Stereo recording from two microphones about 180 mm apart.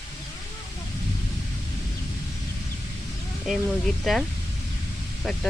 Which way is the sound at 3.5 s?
Centre (ahead or behind).